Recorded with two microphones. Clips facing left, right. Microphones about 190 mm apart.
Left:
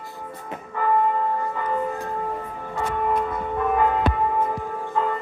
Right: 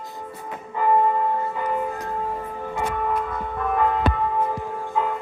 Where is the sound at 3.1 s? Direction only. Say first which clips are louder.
Left 2 dB; 5° left (ahead or behind).